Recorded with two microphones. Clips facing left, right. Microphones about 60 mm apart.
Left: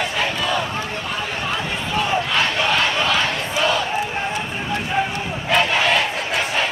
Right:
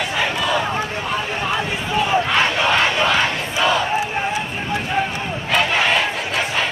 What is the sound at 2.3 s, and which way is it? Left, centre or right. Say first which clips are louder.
Battle cry: right 2 dB; right.